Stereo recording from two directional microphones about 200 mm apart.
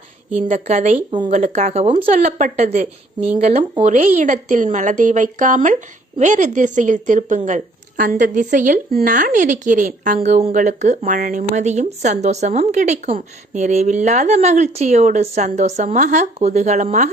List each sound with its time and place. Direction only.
0.3 s speech: 35° right (ahead or behind)